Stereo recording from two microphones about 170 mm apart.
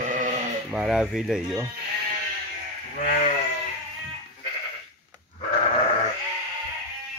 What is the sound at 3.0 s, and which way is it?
Sheep, 55° left (ahead or behind).